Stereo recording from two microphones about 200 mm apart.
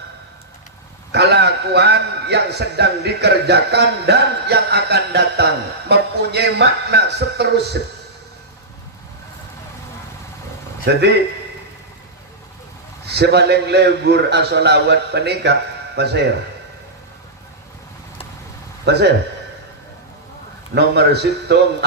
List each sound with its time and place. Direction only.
1.1 s a man's voice: 55° right (ahead or behind)
10.8 s a man's voice: 55° right (ahead or behind)
13.1 s a man's voice: 55° right (ahead or behind)
18.9 s a man's voice: 55° right (ahead or behind)
20.7 s a man's voice: 55° right (ahead or behind)